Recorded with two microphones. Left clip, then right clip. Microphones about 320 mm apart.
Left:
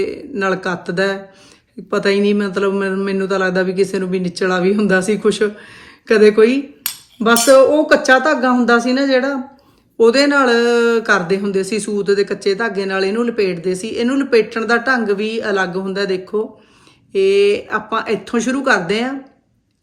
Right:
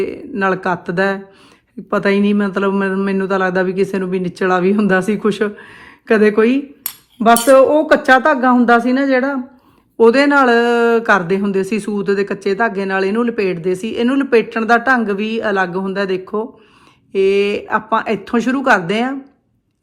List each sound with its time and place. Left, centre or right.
0.0 s speech: centre